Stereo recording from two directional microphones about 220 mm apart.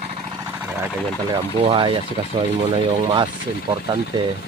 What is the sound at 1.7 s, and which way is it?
Speech, 20° right (ahead or behind).